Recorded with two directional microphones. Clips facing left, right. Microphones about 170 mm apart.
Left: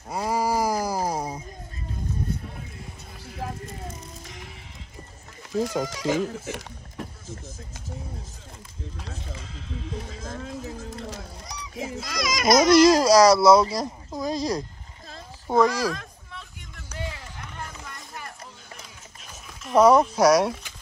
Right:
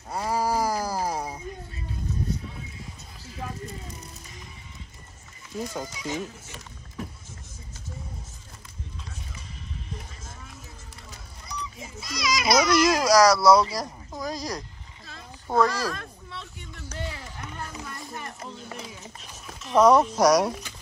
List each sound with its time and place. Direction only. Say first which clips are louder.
0.1 s a sound: left 1 dB; 10° left (ahead or behind)
4.2 s music: left 4 dB; 90° left
5.5 s speech: left 7 dB; 80° left
9.7 s speech: left 8 dB; 90° left; by 12.7 s 45° left (ahead or behind)
12.7 s speech: left 5 dB; 30° left (ahead or behind); by 16.4 s 15° left (ahead or behind)
19.6 s speech: left 1 dB; 5° left (ahead or behind)